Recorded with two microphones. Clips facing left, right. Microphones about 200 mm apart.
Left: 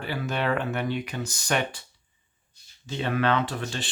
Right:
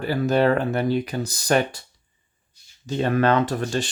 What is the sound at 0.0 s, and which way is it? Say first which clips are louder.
Speech: right 9 dB; 40° right (ahead or behind).